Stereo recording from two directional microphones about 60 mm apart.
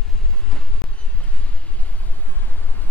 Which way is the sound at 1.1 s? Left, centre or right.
Left.